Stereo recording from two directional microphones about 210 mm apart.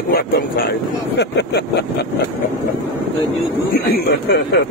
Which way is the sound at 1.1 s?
50° left (ahead or behind).